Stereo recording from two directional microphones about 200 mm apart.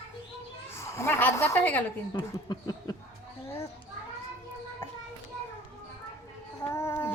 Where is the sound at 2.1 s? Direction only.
20° left (ahead or behind).